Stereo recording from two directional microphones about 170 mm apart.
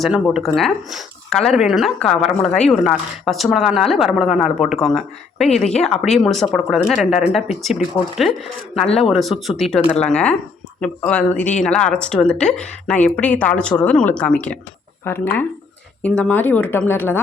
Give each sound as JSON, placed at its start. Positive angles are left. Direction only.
{"t": 0.3, "sound": "speech", "side_deg": 0}